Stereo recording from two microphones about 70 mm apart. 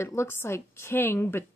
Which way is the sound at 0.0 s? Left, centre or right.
Left.